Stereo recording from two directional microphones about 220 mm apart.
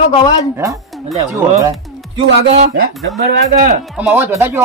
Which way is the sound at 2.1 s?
30° right (ahead or behind).